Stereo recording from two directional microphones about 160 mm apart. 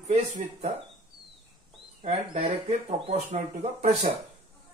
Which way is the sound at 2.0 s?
45° right (ahead or behind).